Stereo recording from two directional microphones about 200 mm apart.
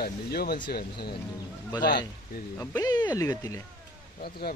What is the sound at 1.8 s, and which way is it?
Speech, 50° left (ahead or behind).